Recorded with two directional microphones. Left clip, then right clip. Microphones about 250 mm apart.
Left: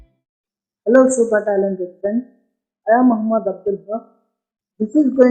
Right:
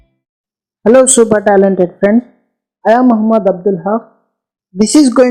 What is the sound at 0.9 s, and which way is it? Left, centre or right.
Speech, right.